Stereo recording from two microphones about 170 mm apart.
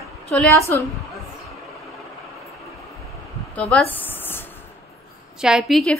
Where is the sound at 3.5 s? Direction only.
5° left (ahead or behind).